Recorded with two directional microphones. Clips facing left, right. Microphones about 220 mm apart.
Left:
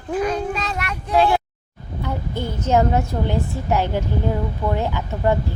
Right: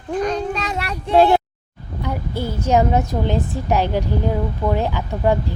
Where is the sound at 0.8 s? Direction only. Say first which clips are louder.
Right 3 dB; 30° right (ahead or behind).